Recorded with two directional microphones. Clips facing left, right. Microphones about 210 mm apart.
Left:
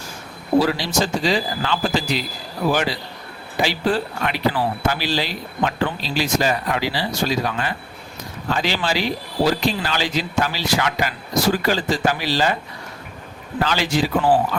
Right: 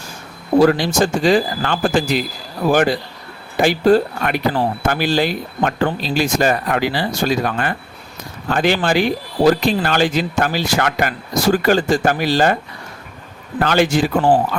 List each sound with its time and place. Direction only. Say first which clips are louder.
0.6 s speech: right 7 dB; 50° right (ahead or behind)
13.6 s speech: right 5 dB; 50° right (ahead or behind)